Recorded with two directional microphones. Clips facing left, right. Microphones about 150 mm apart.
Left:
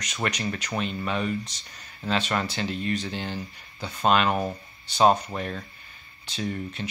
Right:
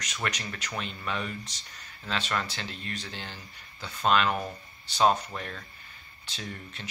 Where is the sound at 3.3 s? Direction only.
25° left (ahead or behind).